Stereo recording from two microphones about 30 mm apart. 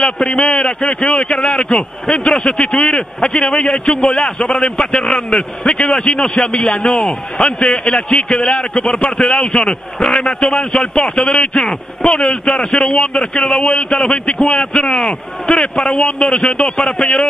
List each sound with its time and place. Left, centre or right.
0.3 s a man's voice: left
15.4 s a man's voice: left